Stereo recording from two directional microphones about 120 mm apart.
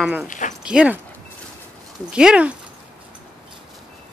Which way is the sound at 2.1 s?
10° right (ahead or behind).